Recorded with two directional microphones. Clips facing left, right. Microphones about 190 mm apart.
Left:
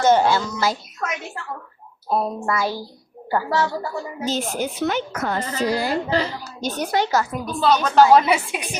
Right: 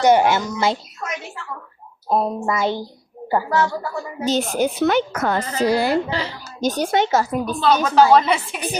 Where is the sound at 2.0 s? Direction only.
20° right (ahead or behind).